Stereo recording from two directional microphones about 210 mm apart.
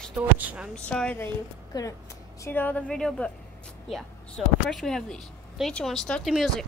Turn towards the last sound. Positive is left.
turn(degrees=0)  # may be behind; listen again after turning